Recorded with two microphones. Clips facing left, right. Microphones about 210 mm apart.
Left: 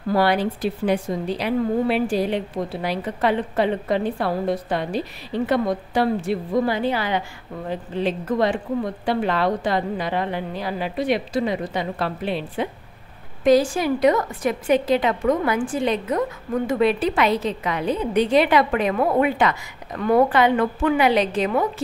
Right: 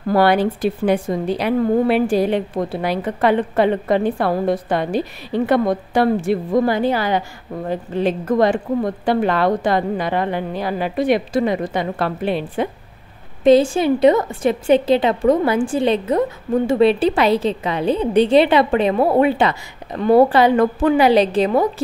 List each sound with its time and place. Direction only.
0.1 s a woman's voice: 55° right (ahead or behind)
13.4 s a woman's voice: 25° right (ahead or behind)